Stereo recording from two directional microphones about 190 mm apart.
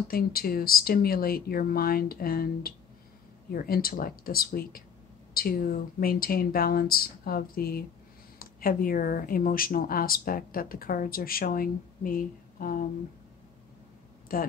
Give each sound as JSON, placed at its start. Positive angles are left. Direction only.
{"t": 0.1, "sound": "speech", "side_deg": 50}
{"t": 14.3, "sound": "speech", "side_deg": 50}